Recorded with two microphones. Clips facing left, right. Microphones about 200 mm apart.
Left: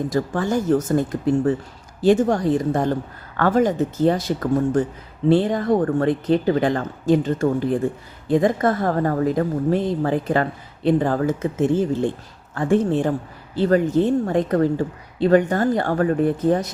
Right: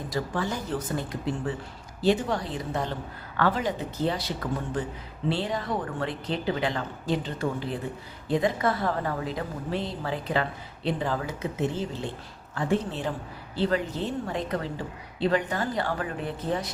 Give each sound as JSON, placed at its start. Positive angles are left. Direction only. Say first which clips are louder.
{"t": 0.1, "sound": "a woman's voice", "louder": "left 4 dB", "side_deg": 45}